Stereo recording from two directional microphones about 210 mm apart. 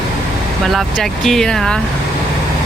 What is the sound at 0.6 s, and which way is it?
Speech, centre (ahead or behind).